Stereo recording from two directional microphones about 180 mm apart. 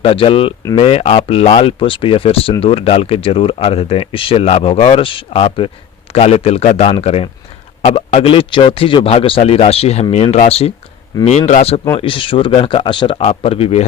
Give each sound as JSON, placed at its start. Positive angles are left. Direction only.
{"t": 0.0, "sound": "speech", "side_deg": 30}